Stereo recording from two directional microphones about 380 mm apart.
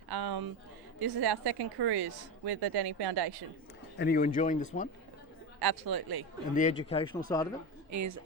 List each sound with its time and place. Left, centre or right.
0.1 s a sound: right
0.9 s a woman's voice: right
3.9 s speech: left
5.5 s speech: right
6.5 s speech: centre
7.9 s speech: right